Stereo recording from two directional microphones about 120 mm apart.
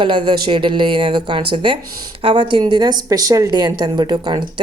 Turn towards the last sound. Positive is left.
turn(degrees=-40)  # may be behind; listen again after turning